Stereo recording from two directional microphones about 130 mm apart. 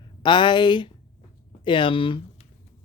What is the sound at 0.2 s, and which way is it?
Speech, 35° left (ahead or behind).